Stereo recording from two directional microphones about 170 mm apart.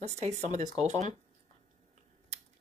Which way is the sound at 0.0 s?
40° right (ahead or behind).